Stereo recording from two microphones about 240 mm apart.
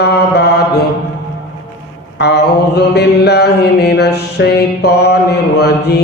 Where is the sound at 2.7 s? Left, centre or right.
Left.